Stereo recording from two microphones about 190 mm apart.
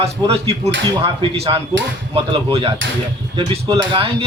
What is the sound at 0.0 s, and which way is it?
Speech, 30° right (ahead or behind).